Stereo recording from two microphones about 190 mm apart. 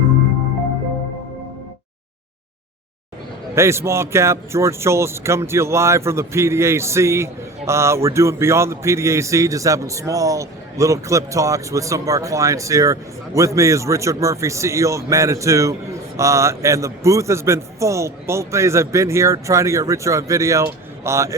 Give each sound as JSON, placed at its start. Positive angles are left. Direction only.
{"t": 3.5, "sound": "speech", "side_deg": -15}